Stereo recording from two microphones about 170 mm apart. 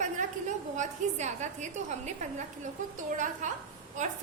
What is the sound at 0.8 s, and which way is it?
A woman's voice, 45° right (ahead or behind).